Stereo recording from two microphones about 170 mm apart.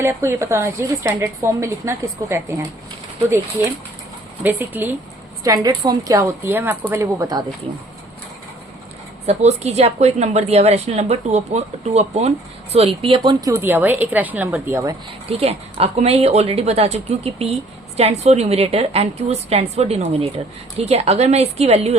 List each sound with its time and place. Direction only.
0.0 s a woman's voice: 15° right (ahead or behind)
4.4 s a woman's voice: 10° right (ahead or behind)
9.2 s a woman's voice: 40° right (ahead or behind)
13.4 s a woman's voice: 15° right (ahead or behind)
15.3 s a woman's voice: 35° right (ahead or behind)